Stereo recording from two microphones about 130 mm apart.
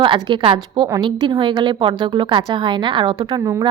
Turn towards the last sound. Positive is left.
turn(degrees=-40)  # may be behind; listen again after turning